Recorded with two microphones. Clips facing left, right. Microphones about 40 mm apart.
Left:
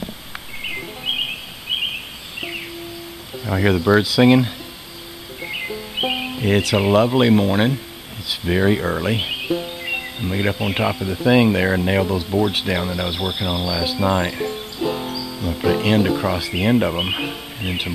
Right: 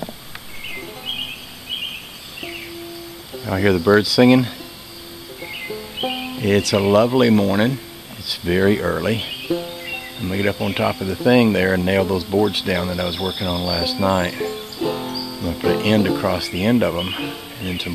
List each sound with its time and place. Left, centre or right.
0.7 s music: left
3.4 s speech: centre
3.7 s speech: centre
5.4 s music: centre
6.7 s speech: centre
9.1 s music: centre
10.3 s speech: centre
15.1 s music: left
15.5 s speech: centre
16.3 s speech: centre